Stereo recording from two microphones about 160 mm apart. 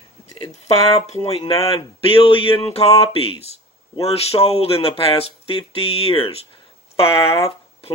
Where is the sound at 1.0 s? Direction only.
40° left (ahead or behind).